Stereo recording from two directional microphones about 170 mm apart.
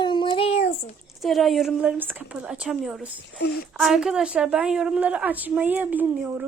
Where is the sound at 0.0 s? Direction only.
25° left (ahead or behind).